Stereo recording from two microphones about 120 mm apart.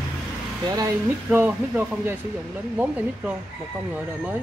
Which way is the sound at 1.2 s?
15° right (ahead or behind).